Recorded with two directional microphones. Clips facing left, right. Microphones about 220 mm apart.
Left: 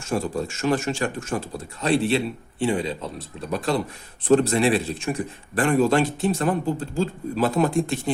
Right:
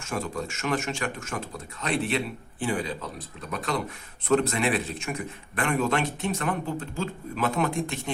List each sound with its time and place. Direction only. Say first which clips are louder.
0.0 s speech: left 6 dB; 30° left (ahead or behind)